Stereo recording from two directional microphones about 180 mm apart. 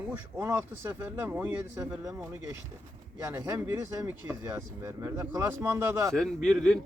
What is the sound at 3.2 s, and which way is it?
Speech, 10° right (ahead or behind).